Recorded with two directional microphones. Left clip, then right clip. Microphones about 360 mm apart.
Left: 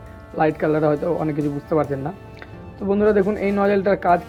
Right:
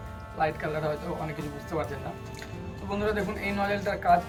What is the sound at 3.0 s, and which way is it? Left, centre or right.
Speech, centre.